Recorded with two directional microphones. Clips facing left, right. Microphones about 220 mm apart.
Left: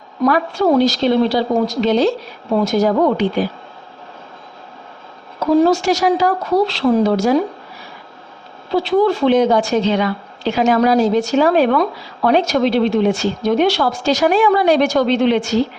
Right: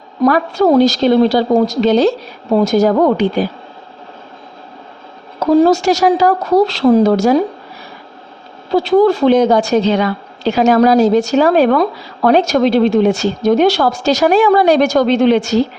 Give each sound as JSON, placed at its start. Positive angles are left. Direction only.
{"t": 0.3, "sound": "a woman's voice", "side_deg": -40}
{"t": 5.6, "sound": "a woman's voice", "side_deg": -40}
{"t": 8.7, "sound": "a woman's voice", "side_deg": -40}